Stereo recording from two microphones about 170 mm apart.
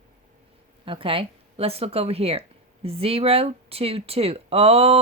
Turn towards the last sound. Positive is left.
turn(degrees=-35)  # may be behind; listen again after turning